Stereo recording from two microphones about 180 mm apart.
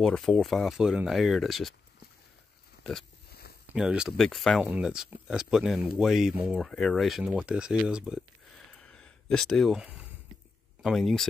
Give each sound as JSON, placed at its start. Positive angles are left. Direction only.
{"t": 0.0, "sound": "speech", "side_deg": 0}
{"t": 2.8, "sound": "pig", "side_deg": 0}
{"t": 3.3, "sound": "a sound", "side_deg": 60}
{"t": 3.6, "sound": "speech", "side_deg": -5}
{"t": 8.7, "sound": "a sound", "side_deg": 5}
{"t": 10.8, "sound": "speech", "side_deg": 0}